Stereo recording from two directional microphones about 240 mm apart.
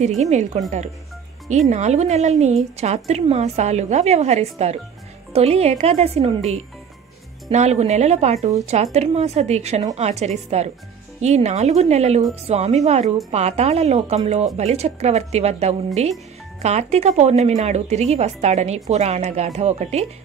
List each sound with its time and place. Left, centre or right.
0.2 s a woman's voice: right
1.7 s a woman's voice: right